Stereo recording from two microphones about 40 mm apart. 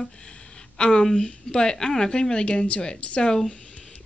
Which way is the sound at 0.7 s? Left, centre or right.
Left.